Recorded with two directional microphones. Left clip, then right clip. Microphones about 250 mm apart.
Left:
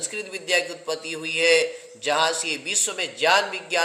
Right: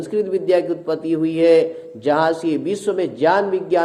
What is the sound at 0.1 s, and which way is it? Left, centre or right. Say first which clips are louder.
A man's voice: right 8 dB; left.